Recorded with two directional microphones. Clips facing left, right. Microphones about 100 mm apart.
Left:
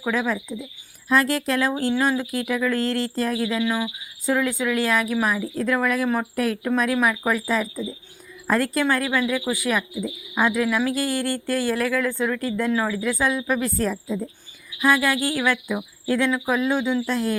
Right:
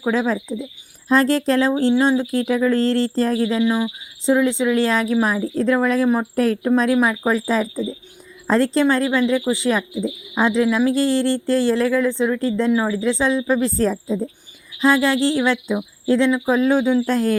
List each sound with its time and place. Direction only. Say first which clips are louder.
0.0 s speech: right 4 dB; 30° right (ahead or behind)
3.6 s a woman's voice: right 5 dB; 20° right (ahead or behind)
16.6 s speech: right 6 dB; 40° right (ahead or behind)